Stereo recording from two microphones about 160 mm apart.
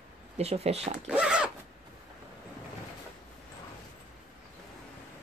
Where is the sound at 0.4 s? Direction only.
40° right (ahead or behind).